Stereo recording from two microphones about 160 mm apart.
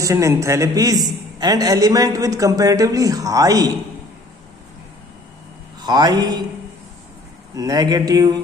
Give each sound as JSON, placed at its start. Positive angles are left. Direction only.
{"t": 0.0, "sound": "a man's voice", "side_deg": -20}
{"t": 5.8, "sound": "a man's voice", "side_deg": -25}
{"t": 7.5, "sound": "a man's voice", "side_deg": -25}